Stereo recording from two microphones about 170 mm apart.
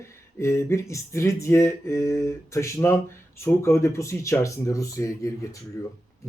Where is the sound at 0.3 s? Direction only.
15° left (ahead or behind).